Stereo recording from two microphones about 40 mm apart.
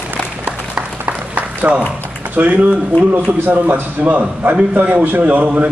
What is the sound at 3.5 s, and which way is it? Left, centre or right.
A man's voice, right.